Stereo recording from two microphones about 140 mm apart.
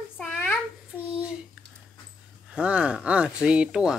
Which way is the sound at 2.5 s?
10° right (ahead or behind).